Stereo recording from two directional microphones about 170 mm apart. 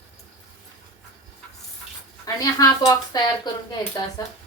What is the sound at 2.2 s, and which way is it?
A woman's voice, 20° left (ahead or behind).